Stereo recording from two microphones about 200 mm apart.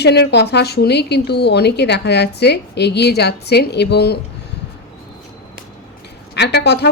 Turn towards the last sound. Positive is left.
turn(degrees=55)  # may be behind; listen again after turning